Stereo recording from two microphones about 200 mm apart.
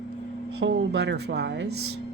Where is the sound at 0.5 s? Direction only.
55° right (ahead or behind).